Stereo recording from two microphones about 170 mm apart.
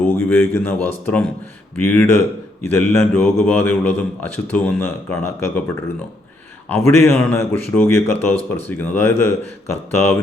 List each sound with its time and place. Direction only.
0.0 s speech: 10° left (ahead or behind)